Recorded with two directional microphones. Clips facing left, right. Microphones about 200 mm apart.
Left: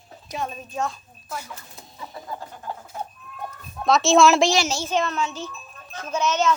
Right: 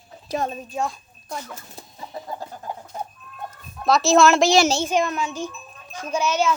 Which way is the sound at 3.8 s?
Centre (ahead or behind).